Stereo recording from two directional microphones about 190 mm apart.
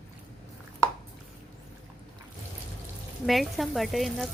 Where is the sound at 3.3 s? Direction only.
Centre (ahead or behind).